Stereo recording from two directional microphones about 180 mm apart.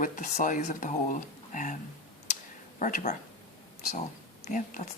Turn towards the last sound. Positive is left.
turn(degrees=45)  # may be behind; listen again after turning